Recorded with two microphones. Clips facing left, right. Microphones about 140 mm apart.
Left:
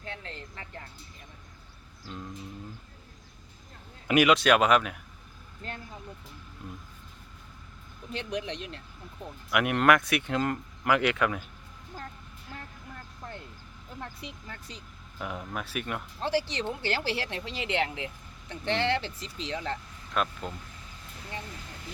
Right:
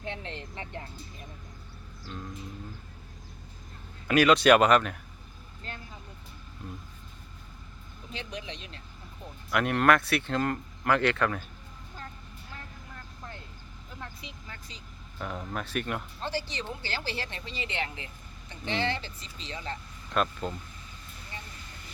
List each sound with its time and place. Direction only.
0.0 s a sound: 25° right (ahead or behind)
0.5 s speech: 25° right (ahead or behind)
4.1 s speech: 15° left (ahead or behind)
4.4 s speech: centre (ahead or behind)
8.1 s speech: 60° left (ahead or behind)
9.5 s speech: 15° left (ahead or behind)
14.0 s speech: 55° left (ahead or behind)
15.2 s speech: 10° left (ahead or behind)
16.2 s speech: 75° left (ahead or behind)
20.1 s speech: 5° left (ahead or behind)
21.2 s vehicle: 90° left